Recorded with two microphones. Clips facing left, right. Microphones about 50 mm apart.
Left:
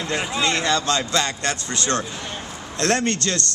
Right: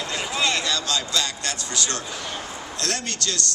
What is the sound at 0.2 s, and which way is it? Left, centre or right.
Speech, left.